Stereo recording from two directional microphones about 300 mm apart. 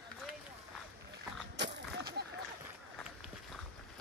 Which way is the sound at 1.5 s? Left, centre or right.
Right.